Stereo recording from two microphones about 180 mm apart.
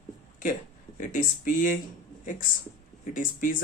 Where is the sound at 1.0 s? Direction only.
45° left (ahead or behind).